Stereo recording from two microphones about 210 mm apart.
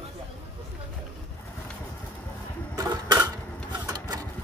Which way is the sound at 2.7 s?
15° right (ahead or behind).